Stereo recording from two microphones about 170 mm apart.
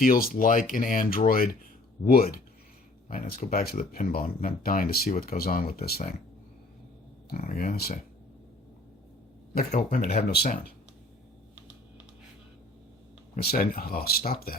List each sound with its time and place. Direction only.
0.0 s speech: 55° left (ahead or behind)
7.3 s speech: 55° left (ahead or behind)
9.6 s speech: 55° left (ahead or behind)
13.3 s speech: 60° left (ahead or behind)